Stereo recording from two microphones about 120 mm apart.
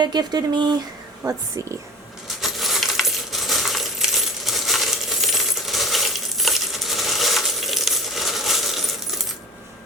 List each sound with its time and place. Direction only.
0.0 s speech: 35° right (ahead or behind)
2.2 s coin: centre (ahead or behind)